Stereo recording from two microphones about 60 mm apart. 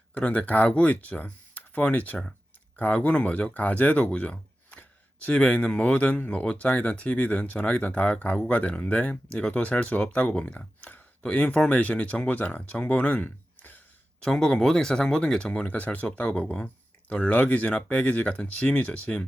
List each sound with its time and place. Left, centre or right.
0.1 s speech: left
5.3 s speech: centre
13.2 s a sound: left
14.2 s speech: centre
15.6 s speech: left
18.0 s speech: left